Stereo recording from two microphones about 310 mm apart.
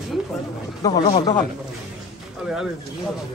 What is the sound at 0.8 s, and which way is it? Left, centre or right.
Speech, centre.